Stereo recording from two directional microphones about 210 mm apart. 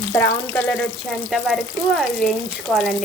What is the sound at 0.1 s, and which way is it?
Frying, 10° left (ahead or behind).